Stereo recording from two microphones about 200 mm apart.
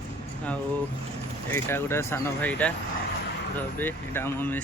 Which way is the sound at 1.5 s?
10° left (ahead or behind).